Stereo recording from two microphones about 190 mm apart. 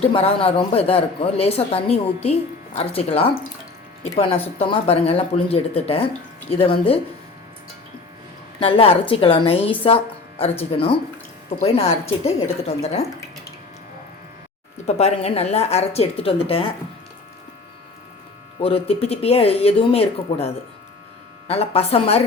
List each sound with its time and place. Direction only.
0.0 s speech: 30° left (ahead or behind)
8.5 s a woman's voice: 30° left (ahead or behind)
14.8 s speech: 35° left (ahead or behind)
18.6 s speech: 30° left (ahead or behind)